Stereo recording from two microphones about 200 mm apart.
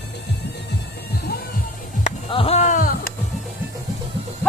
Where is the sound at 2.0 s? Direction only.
30° left (ahead or behind); by 3.1 s 45° left (ahead or behind).